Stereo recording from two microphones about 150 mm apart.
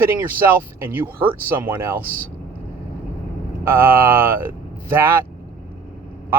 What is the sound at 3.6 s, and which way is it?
Speech, 15° right (ahead or behind).